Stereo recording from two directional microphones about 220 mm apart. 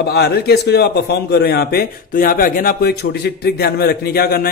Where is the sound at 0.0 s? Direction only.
50° left (ahead or behind).